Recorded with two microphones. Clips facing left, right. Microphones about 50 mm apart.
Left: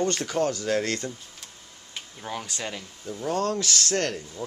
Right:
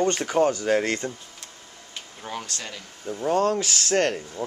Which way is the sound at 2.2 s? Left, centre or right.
Centre.